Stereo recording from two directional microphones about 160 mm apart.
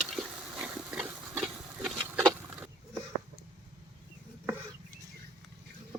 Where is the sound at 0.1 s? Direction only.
5° right (ahead or behind).